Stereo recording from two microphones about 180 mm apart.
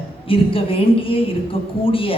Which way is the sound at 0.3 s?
30° left (ahead or behind).